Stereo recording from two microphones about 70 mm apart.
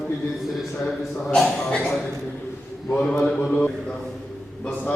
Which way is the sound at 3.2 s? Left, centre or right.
Centre.